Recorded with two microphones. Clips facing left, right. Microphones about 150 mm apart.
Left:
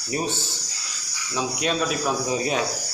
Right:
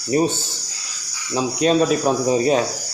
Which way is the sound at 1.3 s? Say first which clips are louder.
Right 8 dB; 35° right (ahead or behind).